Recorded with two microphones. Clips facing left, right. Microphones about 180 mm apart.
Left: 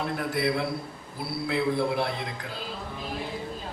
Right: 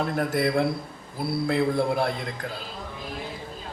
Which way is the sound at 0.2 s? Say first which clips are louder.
Right 4 dB; 45° right (ahead or behind).